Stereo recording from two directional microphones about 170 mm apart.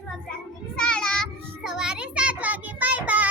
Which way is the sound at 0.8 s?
5° left (ahead or behind).